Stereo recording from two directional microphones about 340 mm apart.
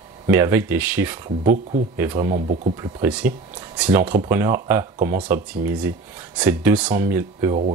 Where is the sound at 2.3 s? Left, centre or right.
Right.